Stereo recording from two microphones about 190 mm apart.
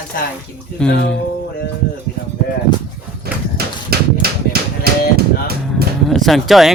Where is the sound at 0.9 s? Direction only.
70° left (ahead or behind).